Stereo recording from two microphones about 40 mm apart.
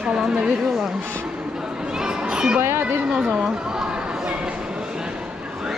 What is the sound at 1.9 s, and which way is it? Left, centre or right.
Children playing, centre.